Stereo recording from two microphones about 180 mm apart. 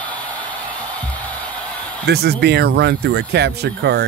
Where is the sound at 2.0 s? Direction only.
65° right (ahead or behind).